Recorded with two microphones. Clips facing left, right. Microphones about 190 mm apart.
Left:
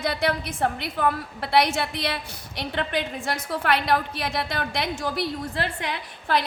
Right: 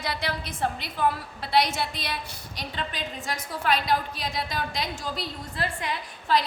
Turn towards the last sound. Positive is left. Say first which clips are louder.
# even
turn(degrees=65)  # may be behind; listen again after turning